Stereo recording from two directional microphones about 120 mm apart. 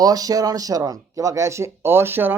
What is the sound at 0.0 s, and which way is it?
Speech, 30° right (ahead or behind).